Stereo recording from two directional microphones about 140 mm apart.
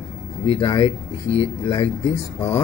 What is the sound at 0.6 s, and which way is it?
A woman's voice, 25° left (ahead or behind).